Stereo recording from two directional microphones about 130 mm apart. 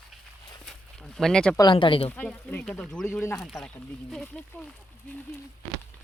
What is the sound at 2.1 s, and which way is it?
Speech, 10° left (ahead or behind).